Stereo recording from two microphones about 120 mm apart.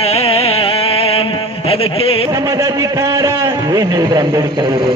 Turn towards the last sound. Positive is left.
turn(degrees=-30)  # may be behind; listen again after turning